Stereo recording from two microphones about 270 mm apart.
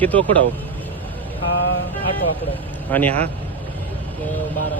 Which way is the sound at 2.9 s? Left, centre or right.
Centre.